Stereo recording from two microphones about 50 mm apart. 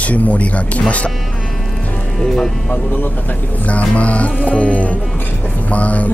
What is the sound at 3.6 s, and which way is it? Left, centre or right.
Speech, left.